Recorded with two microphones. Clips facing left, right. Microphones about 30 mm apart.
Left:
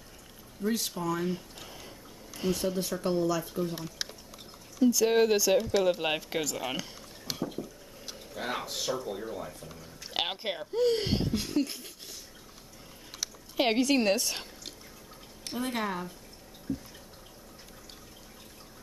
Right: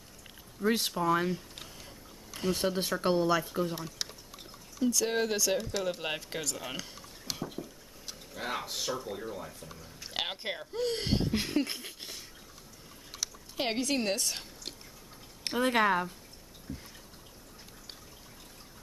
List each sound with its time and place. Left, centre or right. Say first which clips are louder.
0.7 s speech: right 3 dB; right
2.5 s speech: right 1 dB; right
4.0 s a sound: left 1 dB; centre
4.7 s speech: left 6 dB; centre
11.3 s speech: left 1 dB; right
13.1 s speech: left 1 dB; centre
15.7 s speech: right 8 dB; right
16.7 s drip: left 8 dB; right